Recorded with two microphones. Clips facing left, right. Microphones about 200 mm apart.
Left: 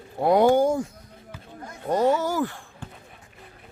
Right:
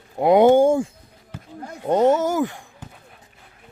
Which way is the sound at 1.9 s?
20° right (ahead or behind).